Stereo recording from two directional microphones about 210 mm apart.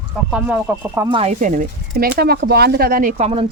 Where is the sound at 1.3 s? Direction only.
40° right (ahead or behind).